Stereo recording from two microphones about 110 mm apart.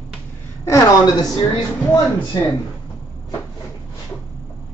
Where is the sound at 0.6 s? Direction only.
35° left (ahead or behind).